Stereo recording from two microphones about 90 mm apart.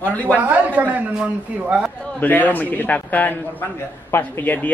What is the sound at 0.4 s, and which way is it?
A man's voice, 15° right (ahead or behind).